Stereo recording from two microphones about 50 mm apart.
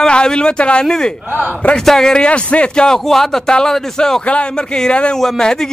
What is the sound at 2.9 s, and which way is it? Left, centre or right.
Speech, centre.